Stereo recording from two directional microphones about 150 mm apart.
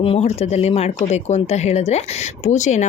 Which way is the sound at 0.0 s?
40° left (ahead or behind).